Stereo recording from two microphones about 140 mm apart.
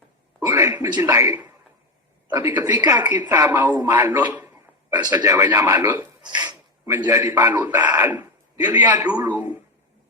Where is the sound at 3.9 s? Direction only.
15° right (ahead or behind).